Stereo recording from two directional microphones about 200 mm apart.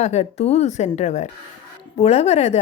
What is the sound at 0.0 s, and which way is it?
A woman's voice, 35° left (ahead or behind).